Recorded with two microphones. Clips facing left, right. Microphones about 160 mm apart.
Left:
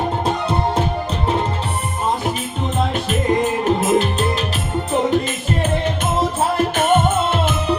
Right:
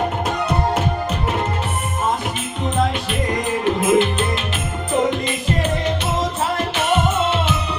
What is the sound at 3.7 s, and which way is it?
Music, 40° left (ahead or behind).